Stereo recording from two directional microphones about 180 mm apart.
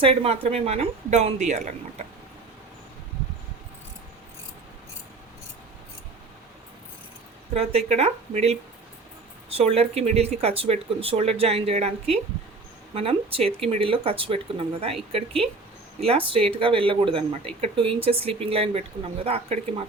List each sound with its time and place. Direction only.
0.0 s speech: 30° right (ahead or behind)
7.5 s speech: 35° right (ahead or behind)